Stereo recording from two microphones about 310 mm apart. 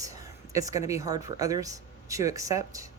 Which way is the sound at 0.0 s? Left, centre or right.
Centre.